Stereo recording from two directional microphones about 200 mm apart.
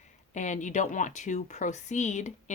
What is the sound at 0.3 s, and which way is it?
A woman's voice, 35° left (ahead or behind).